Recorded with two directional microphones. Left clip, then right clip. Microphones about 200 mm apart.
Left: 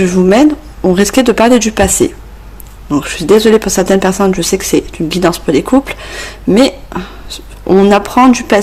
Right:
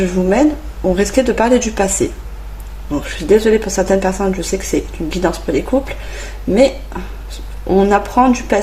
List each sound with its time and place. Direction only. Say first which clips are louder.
0.0 s speech: left 5 dB; 45° left (ahead or behind)